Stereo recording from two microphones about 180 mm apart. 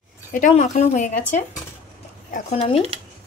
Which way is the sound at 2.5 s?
35° left (ahead or behind).